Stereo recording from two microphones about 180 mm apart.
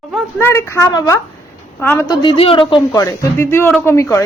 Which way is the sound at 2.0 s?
30° left (ahead or behind).